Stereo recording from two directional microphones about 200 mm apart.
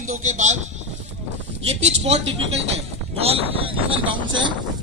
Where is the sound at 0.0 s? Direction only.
35° right (ahead or behind).